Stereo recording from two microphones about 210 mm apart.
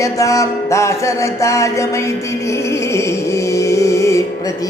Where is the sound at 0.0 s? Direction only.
15° left (ahead or behind).